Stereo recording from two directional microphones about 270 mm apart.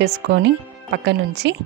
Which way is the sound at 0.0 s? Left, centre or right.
Right.